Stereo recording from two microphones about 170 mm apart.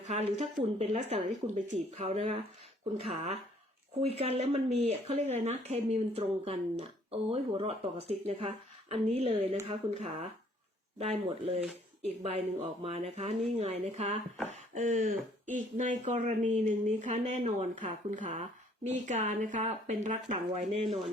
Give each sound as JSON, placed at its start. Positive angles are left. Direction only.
{"t": 0.1, "sound": "speech", "side_deg": -40}
{"t": 14.5, "sound": "a sound", "side_deg": -45}
{"t": 15.4, "sound": "a woman's voice", "side_deg": -50}
{"t": 20.8, "sound": "speech", "side_deg": 0}